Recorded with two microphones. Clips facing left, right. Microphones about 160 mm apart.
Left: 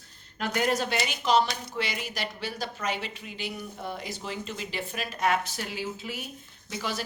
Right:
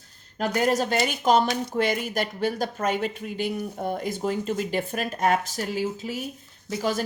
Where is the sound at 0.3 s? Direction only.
40° right (ahead or behind).